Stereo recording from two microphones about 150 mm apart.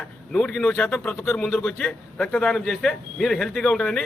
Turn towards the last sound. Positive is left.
turn(degrees=5)  # may be behind; listen again after turning